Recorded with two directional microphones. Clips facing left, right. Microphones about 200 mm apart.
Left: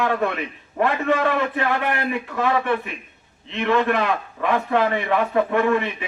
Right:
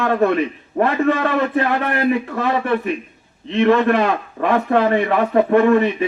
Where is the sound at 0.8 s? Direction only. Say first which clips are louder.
Right 3 dB; 45° right (ahead or behind).